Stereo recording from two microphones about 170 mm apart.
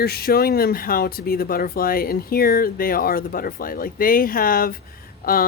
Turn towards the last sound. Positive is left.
turn(degrees=60)  # may be behind; listen again after turning